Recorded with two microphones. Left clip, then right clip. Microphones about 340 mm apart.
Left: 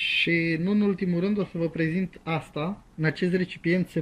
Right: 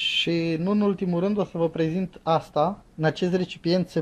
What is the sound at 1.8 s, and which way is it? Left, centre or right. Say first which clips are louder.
Speech: right 2 dB; right.